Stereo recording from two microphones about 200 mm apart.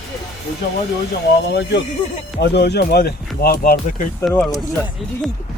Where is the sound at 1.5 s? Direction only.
60° left (ahead or behind).